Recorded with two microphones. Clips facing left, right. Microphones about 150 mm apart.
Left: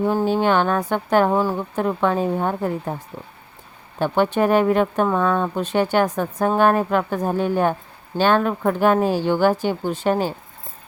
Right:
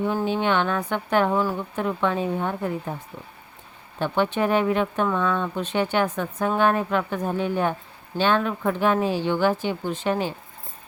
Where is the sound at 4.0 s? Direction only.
45° left (ahead or behind).